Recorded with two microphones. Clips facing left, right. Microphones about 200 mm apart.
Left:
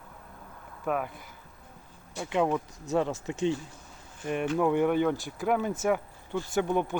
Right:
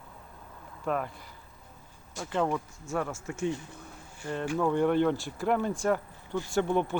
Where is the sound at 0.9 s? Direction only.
5° left (ahead or behind).